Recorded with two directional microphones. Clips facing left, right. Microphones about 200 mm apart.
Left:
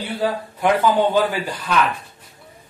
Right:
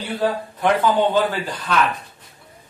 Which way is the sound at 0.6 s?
10° left (ahead or behind).